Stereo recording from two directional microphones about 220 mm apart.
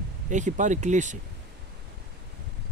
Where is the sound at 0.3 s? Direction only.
35° right (ahead or behind).